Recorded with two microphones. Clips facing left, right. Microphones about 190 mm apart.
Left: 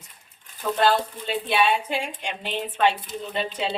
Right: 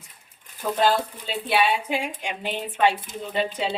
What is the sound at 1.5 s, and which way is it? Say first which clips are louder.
A woman's voice: right 1 dB; 10° right (ahead or behind).